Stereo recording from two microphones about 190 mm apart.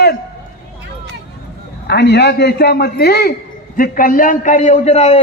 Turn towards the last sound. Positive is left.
turn(degrees=35)  # may be behind; listen again after turning